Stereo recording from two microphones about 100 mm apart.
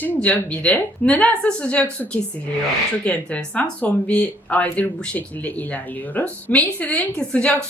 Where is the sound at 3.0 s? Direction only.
10° left (ahead or behind).